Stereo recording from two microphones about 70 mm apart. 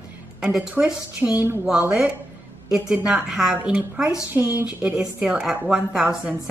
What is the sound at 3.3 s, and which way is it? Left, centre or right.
A woman's voice, centre.